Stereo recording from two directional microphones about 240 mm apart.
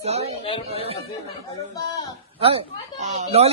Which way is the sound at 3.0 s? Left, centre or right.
Right.